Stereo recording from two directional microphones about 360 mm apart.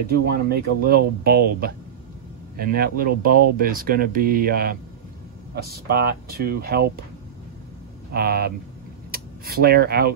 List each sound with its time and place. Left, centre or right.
0.2 s speech: right
8.1 s speech: right